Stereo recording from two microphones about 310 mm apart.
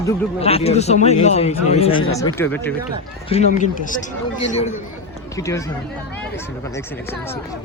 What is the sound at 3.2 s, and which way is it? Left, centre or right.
Speech, left.